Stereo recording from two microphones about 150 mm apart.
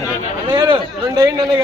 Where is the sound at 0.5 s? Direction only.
25° right (ahead or behind).